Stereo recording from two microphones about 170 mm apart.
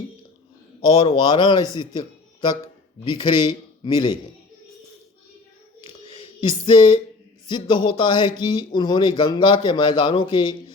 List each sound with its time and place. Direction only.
0.9 s a man's voice: 30° left (ahead or behind)
3.0 s a man's voice: 25° left (ahead or behind)
5.8 s a sound: 35° left (ahead or behind)
7.4 s a man's voice: 25° left (ahead or behind)